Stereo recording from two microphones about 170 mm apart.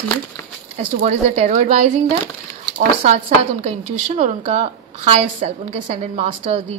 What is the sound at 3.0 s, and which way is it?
A woman's voice, 40° right (ahead or behind).